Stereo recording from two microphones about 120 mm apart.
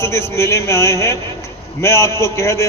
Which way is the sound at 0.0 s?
20° left (ahead or behind).